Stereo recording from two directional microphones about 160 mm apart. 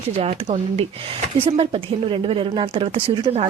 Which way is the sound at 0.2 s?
40° right (ahead or behind).